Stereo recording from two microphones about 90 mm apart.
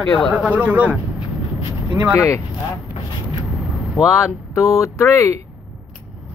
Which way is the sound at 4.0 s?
35° left (ahead or behind).